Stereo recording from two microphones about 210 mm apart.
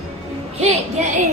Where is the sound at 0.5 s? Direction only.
35° right (ahead or behind).